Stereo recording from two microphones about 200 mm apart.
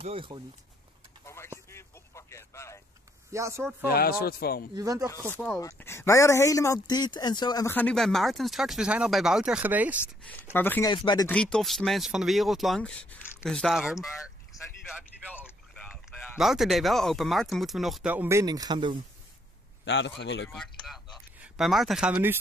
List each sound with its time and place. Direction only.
0.0 s speech: 25° right (ahead or behind)
1.2 s a sound: 15° left (ahead or behind)
3.3 s speech: 15° right (ahead or behind)
3.8 s a man's voice: 50° left (ahead or behind)
4.7 s speech: 15° right (ahead or behind)
5.6 s speech: 15° left (ahead or behind)
7.7 s speech: 5° left (ahead or behind)
10.5 s speech: 10° left (ahead or behind)
10.9 s speech: 20° left (ahead or behind)
11.2 s speech: 5° left (ahead or behind)
14.5 s a sound: 15° left (ahead or behind)
15.4 s speech: 5° left (ahead or behind); by 18.9 s 20° right (ahead or behind)
19.8 s a man's voice: 65° left (ahead or behind)
20.8 s speech: centre (ahead or behind)